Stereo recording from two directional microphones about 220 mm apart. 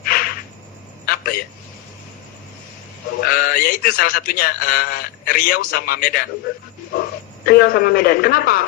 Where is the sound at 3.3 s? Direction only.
40° left (ahead or behind).